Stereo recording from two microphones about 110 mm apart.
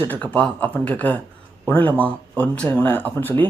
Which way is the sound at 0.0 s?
15° left (ahead or behind).